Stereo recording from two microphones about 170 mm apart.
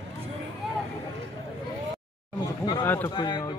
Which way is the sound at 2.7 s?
15° left (ahead or behind).